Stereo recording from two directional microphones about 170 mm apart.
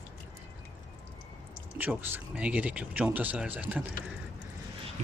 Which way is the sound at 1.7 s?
10° right (ahead or behind).